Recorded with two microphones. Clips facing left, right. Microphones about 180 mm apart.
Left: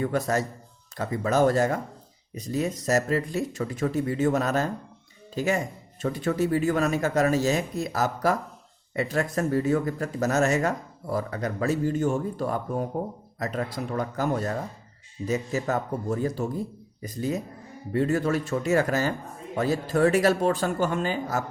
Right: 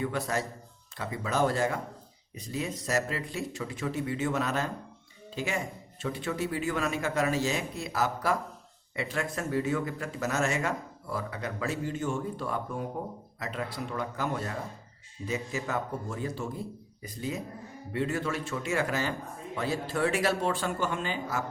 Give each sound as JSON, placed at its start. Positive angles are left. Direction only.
{"t": 0.0, "sound": "speech", "side_deg": 45}